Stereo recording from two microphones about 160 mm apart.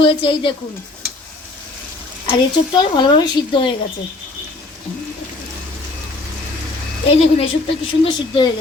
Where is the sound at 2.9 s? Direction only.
30° left (ahead or behind).